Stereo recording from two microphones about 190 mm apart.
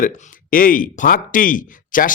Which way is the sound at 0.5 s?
45° left (ahead or behind).